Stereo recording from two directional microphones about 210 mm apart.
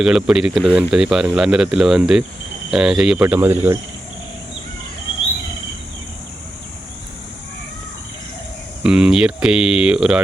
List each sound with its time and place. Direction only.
0.0 s speech: 5° right (ahead or behind)
8.8 s speech: 5° right (ahead or behind)